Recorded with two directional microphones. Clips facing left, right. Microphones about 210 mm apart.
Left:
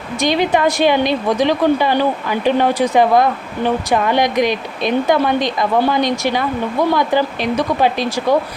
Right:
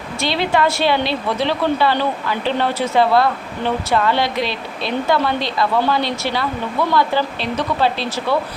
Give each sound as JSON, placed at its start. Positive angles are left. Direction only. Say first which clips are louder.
{"t": 0.2, "sound": "a woman's voice", "louder": "left 3 dB", "side_deg": 15}